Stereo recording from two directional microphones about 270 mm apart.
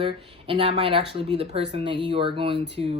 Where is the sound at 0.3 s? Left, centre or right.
Centre.